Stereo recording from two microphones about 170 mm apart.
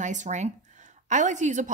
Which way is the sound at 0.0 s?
45° right (ahead or behind).